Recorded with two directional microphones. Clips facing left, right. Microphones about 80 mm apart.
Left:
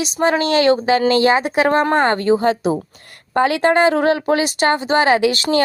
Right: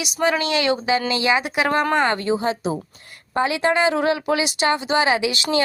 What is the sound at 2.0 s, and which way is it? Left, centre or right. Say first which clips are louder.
A woman's voice: left 5 dB; left.